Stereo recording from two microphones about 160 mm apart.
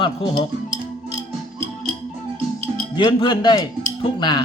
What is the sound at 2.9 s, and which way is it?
Speech, 30° left (ahead or behind).